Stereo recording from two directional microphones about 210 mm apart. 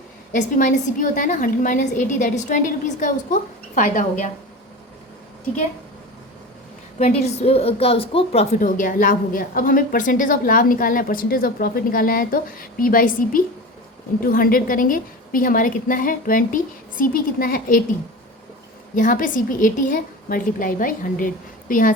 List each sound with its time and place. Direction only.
0.3 s a woman's voice: 35° left (ahead or behind)
7.0 s a woman's voice: 30° left (ahead or behind)
18.9 s a woman's voice: 40° left (ahead or behind)